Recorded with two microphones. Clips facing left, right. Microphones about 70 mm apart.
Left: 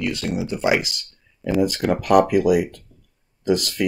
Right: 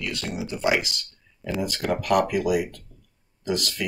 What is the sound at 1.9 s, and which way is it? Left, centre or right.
Speech, left.